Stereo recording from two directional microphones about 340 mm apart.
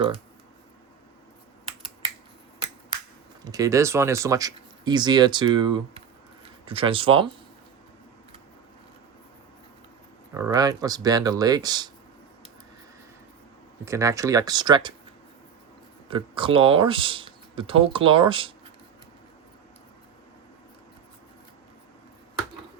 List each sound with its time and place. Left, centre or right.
3.4 s speech: centre
10.3 s speech: centre
13.8 s speech: centre
16.0 s speech: centre